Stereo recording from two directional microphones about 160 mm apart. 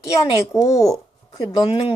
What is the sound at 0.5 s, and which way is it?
Speech, 20° left (ahead or behind).